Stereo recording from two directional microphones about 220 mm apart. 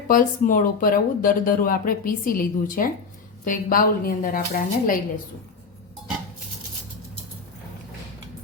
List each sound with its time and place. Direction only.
0.1 s speech: 40° left (ahead or behind)